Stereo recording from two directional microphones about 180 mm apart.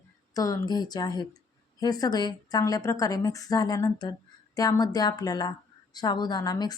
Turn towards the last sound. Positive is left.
turn(degrees=20)  # may be behind; listen again after turning